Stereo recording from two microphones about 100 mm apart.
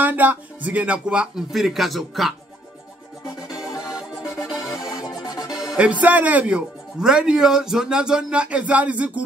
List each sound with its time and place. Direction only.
0.0 s speech: 15° right (ahead or behind); by 2.3 s centre (ahead or behind)
3.9 s music: 5° right (ahead or behind)
5.2 s music: 40° left (ahead or behind)
5.5 s speech: 5° right (ahead or behind)